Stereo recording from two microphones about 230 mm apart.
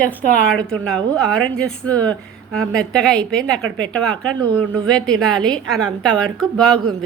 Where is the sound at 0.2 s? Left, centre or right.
Centre.